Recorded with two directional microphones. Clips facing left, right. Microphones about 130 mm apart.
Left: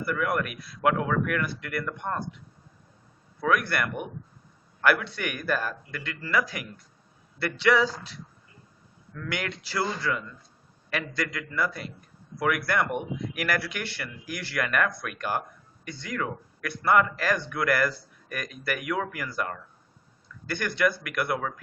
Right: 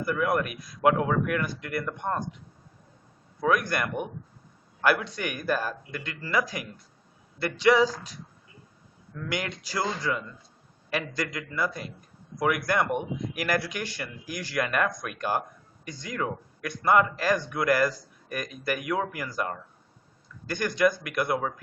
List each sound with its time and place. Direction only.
0.0 s speech: 25° right (ahead or behind)
3.4 s speech: 20° right (ahead or behind)
5.3 s a man's voice: 30° right (ahead or behind)
7.7 s speech: 15° right (ahead or behind)
9.1 s speech: 20° right (ahead or behind)
14.8 s speech: 15° right (ahead or behind)
15.1 s a sound: 25° right (ahead or behind)
16.0 s speech: 25° right (ahead or behind)